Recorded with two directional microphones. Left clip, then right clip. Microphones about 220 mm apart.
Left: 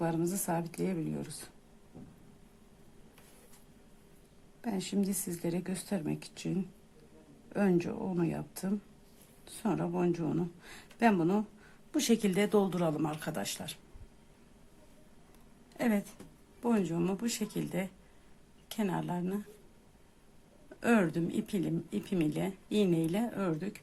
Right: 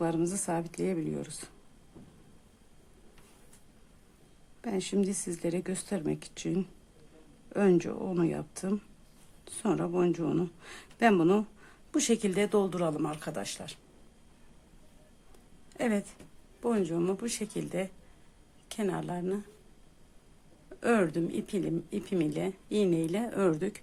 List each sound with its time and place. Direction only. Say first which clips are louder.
0.0 s speech: right 3 dB; 10° right (ahead or behind)
4.6 s speech: right 4 dB; 10° right (ahead or behind)
7.5 s speech: right 5 dB; 10° right (ahead or behind)
15.8 s speech: right 2 dB; 10° right (ahead or behind)
20.8 s speech: right 2 dB; 10° right (ahead or behind)
23.3 s speech: right 7 dB; 20° right (ahead or behind)